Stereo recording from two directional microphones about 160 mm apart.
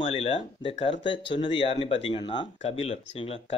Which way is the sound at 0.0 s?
35° left (ahead or behind).